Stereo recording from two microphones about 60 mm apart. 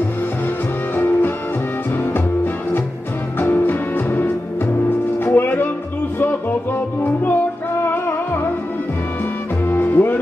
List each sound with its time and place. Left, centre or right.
0.9 s music: left
9.7 s music: left